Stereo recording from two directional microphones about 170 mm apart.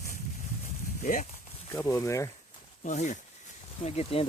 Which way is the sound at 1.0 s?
50° left (ahead or behind).